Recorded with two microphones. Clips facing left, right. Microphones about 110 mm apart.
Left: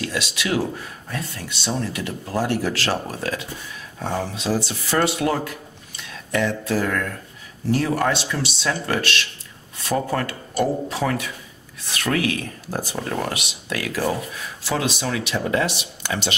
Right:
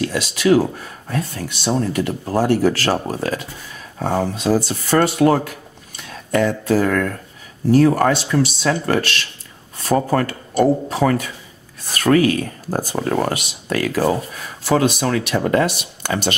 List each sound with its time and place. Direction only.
0.0 s speech: 45° right (ahead or behind)